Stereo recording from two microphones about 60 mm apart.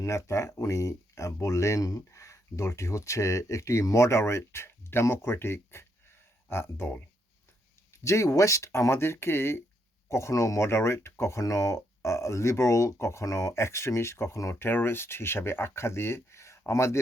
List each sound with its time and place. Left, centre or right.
0.0 s speech: left
7.9 s speech: left
14.6 s speech: left